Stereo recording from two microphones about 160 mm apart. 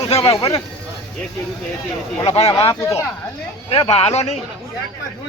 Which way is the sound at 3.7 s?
40° left (ahead or behind).